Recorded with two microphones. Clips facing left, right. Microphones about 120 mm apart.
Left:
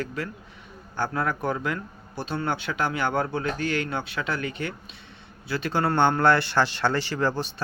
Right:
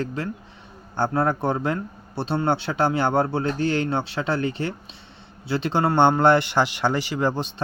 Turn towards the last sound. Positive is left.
turn(degrees=-15)  # may be behind; listen again after turning